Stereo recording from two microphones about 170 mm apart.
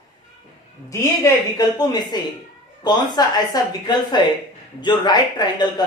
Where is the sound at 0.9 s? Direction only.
20° left (ahead or behind).